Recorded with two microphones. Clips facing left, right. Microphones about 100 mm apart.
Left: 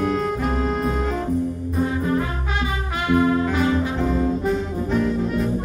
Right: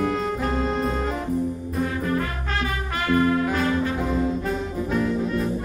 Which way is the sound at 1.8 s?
20° left (ahead or behind).